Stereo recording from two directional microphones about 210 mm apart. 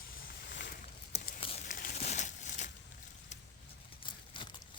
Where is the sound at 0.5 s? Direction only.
55° left (ahead or behind).